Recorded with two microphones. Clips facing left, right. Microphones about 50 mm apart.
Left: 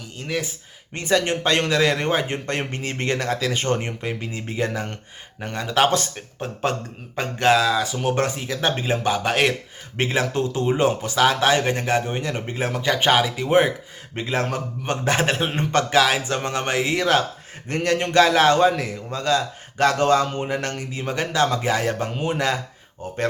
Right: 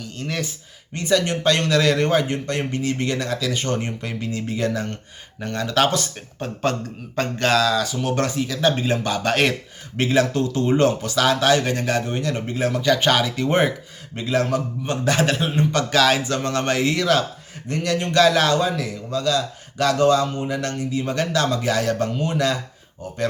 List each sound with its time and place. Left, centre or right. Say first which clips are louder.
0.0 s speech: even; centre
0.9 s a man's voice: even; left
9.3 s speech: right 2 dB; centre
10.0 s a man's voice: right 3 dB; left
10.7 s speech: right 2 dB; centre
11.0 s a man's voice: even; left; by 13.7 s centre
14.2 s a man's voice: right 3 dB; left
16.0 s speech: right 1 dB; centre
16.2 s a man's voice: right 2 dB; left
21.1 s a man's voice: left 2 dB; left